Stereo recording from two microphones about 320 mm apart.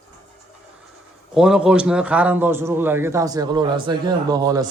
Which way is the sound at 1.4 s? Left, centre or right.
Centre.